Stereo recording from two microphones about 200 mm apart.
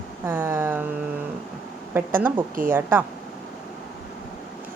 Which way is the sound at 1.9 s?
10° right (ahead or behind).